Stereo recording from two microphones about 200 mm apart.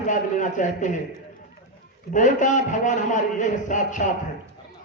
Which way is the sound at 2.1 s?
40° left (ahead or behind).